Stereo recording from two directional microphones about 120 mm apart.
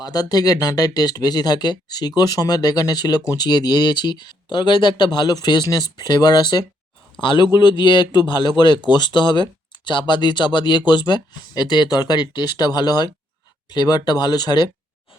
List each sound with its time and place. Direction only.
0.0 s speech: 35° left (ahead or behind)